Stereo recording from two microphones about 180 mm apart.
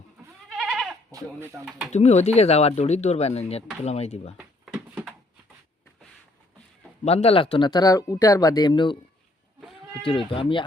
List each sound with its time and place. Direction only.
0.4 s goat: centre (ahead or behind)
1.1 s speech: 15° right (ahead or behind)
1.9 s speech: 40° left (ahead or behind)
4.4 s a sound: 5° right (ahead or behind)
7.0 s speech: 35° left (ahead or behind)
10.0 s speech: 30° left (ahead or behind)